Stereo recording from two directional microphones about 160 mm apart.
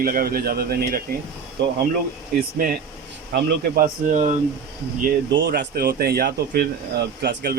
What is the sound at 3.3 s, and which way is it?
Speech, 55° right (ahead or behind).